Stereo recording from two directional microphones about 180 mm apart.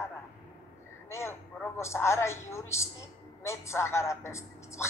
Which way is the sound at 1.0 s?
15° left (ahead or behind).